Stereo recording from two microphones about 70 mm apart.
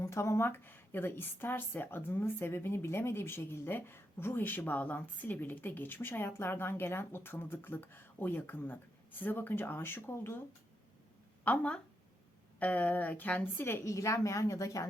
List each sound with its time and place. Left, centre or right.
0.0 s a woman's voice: left
11.4 s a woman's voice: centre
13.8 s a woman's voice: left